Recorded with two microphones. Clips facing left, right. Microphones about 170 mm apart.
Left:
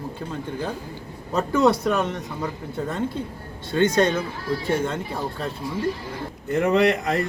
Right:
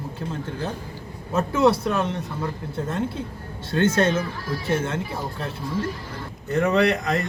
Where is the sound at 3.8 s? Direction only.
15° left (ahead or behind).